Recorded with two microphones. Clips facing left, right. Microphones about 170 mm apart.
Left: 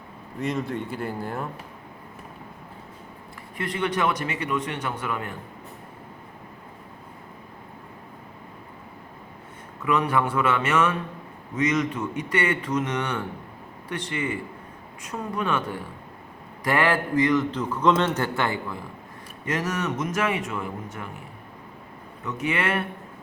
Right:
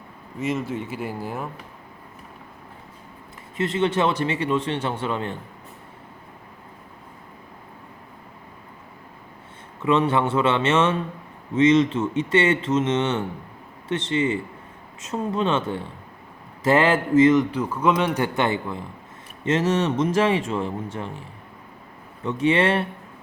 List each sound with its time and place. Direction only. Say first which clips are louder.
0.3 s speech: right 2 dB; 5° right (ahead or behind)
3.6 s speech: right 4 dB; 25° right (ahead or behind)
9.8 s speech: right 3 dB; 25° right (ahead or behind)
17.5 s a man's voice: even; 10° right (ahead or behind); by 22.9 s 30° right (ahead or behind)